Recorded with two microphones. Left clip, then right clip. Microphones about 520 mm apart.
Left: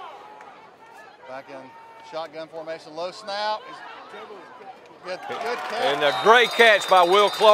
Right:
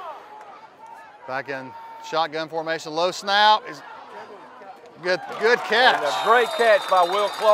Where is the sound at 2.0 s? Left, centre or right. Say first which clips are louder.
Right 9 dB; right.